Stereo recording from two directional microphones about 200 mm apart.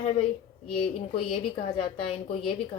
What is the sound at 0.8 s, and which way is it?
A woman's voice, 30° left (ahead or behind).